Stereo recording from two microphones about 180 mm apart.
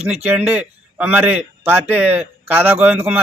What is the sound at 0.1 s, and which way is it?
A man's voice, 5° right (ahead or behind).